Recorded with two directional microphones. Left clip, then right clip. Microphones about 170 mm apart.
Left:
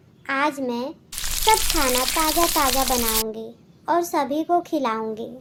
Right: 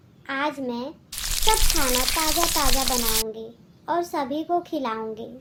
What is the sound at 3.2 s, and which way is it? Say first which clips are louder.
A child's voice: left 2 dB; 35° left (ahead or behind).